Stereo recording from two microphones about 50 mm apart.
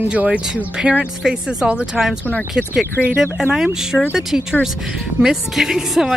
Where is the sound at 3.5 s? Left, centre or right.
Centre.